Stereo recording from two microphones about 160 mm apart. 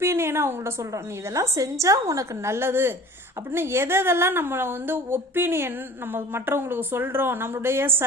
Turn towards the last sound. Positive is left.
turn(degrees=-15)  # may be behind; listen again after turning